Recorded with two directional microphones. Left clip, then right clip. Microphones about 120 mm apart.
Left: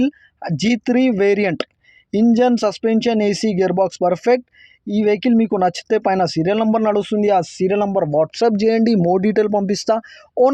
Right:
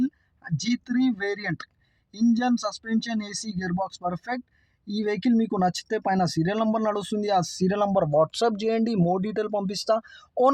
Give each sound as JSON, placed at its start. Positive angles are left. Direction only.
{"t": 0.0, "sound": "speech", "side_deg": 40}
{"t": 7.9, "sound": "speech", "side_deg": 15}
{"t": 8.4, "sound": "speech", "side_deg": 30}